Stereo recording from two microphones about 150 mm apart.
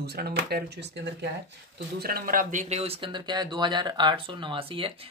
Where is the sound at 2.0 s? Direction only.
85° right.